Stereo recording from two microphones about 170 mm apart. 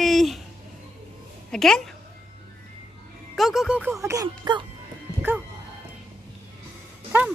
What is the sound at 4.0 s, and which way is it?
Music, 20° right (ahead or behind).